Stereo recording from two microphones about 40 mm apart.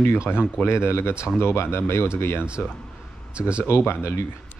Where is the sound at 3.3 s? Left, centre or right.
Right.